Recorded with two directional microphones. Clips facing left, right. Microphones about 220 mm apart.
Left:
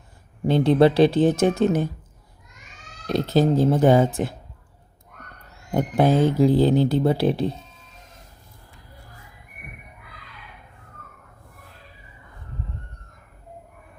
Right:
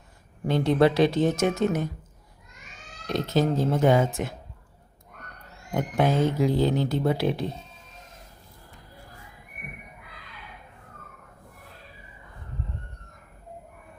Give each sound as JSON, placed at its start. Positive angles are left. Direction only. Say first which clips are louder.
{"t": 0.4, "sound": "speech", "louder": "left 4 dB", "side_deg": 30}
{"t": 3.1, "sound": "speech", "louder": "left 5 dB", "side_deg": 35}
{"t": 5.7, "sound": "speech", "louder": "left 5 dB", "side_deg": 35}